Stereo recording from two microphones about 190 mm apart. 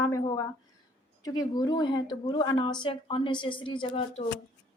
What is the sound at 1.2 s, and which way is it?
Speech, 20° left (ahead or behind).